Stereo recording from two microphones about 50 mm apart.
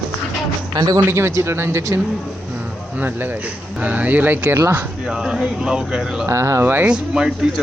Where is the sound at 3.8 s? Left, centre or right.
Right.